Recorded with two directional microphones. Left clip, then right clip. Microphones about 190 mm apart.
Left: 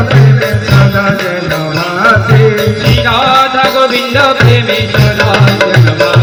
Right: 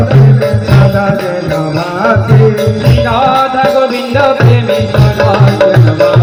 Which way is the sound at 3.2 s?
30° right (ahead or behind).